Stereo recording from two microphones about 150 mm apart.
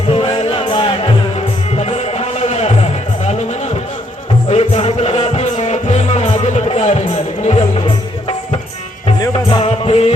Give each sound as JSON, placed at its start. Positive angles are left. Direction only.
{"t": 0.1, "sound": "music", "side_deg": 40}
{"t": 4.4, "sound": "music", "side_deg": 45}
{"t": 9.2, "sound": "music", "side_deg": 25}
{"t": 9.6, "sound": "music", "side_deg": 45}